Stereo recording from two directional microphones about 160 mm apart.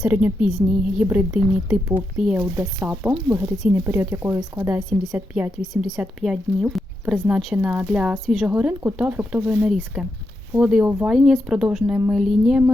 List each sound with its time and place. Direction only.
0.0 s speech: 10° right (ahead or behind)
4.8 s speech: centre (ahead or behind)
5.1 s speech: 10° right (ahead or behind)